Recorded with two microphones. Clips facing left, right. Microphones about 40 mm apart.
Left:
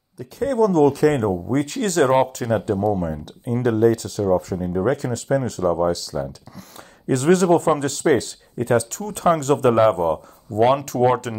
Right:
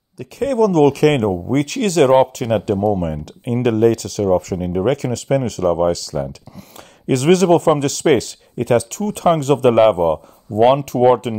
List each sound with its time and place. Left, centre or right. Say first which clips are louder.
0.4 s speech: right 3 dB; right
1.2 s speech: right 3 dB; right
2.9 s speech: right 3 dB; right
3.6 s speech: right 3 dB; right
4.6 s speech: right 3 dB; right
4.8 s speech: right 3 dB; right
7.1 s speech: right 3 dB; right
7.8 s speech: right 3 dB; right